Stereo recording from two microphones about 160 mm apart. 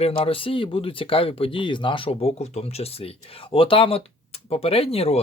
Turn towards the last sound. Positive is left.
turn(degrees=40)  # may be behind; listen again after turning